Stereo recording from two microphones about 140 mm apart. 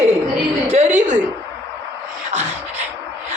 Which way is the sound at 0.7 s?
55° right (ahead or behind).